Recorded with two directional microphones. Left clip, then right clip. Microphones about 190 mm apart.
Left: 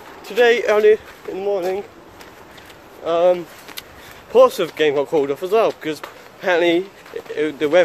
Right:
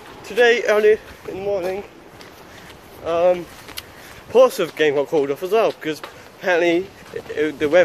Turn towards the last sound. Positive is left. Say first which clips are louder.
# even
turn(degrees=5)  # may be behind; listen again after turning